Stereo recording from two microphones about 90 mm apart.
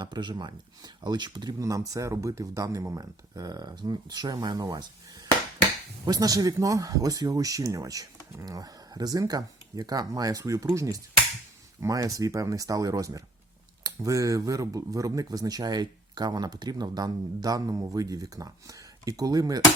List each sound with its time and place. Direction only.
0.0 s speech: 55° right (ahead or behind)
1.5 s speech: 40° right (ahead or behind)